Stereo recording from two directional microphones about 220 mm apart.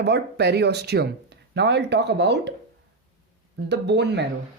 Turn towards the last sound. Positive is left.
turn(degrees=-50)  # may be behind; listen again after turning